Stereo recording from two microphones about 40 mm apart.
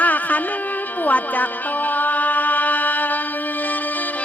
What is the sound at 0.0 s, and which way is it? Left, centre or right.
Music, left.